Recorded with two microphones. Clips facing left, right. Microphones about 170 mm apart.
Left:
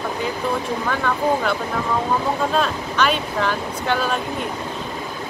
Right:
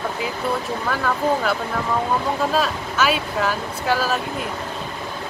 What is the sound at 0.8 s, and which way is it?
Speech, 5° right (ahead or behind).